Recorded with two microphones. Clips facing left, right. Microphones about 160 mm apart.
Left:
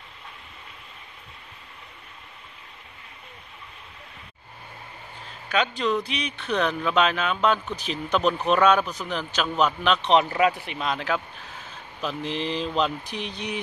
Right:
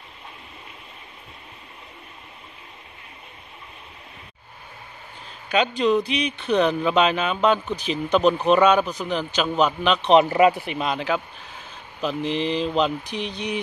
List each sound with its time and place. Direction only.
5.5 s speech: 20° right (ahead or behind)
7.4 s a man's voice: centre (ahead or behind)